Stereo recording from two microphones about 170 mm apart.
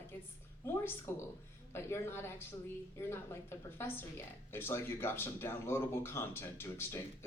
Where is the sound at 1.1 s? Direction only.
15° left (ahead or behind).